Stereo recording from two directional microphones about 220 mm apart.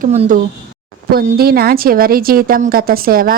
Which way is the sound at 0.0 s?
35° right (ahead or behind).